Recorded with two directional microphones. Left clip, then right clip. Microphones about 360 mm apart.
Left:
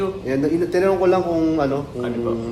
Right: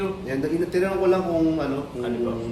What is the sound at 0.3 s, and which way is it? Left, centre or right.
A man's voice, centre.